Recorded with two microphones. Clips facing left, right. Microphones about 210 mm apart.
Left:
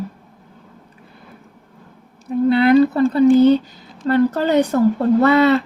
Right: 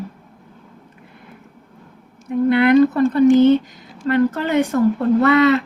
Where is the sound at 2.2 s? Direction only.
30° left (ahead or behind).